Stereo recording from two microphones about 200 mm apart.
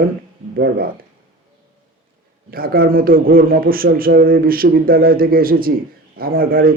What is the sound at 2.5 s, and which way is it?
A man's voice, 45° right (ahead or behind).